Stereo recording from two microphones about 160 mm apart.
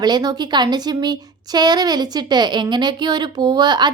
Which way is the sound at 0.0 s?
25° right (ahead or behind).